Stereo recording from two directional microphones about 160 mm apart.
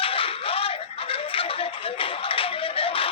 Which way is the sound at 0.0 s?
35° left (ahead or behind).